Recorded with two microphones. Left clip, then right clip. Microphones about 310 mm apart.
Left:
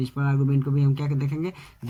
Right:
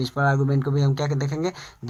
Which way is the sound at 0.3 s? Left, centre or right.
Right.